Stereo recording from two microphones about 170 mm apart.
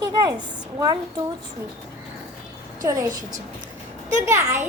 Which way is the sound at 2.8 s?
20° right (ahead or behind).